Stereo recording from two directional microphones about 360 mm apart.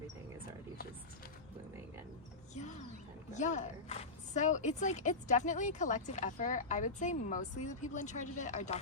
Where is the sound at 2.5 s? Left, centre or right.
Centre.